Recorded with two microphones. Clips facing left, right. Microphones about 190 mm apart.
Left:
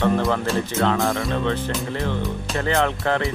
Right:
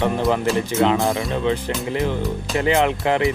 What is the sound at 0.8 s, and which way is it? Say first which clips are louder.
Speech: right 3 dB; 20° right (ahead or behind).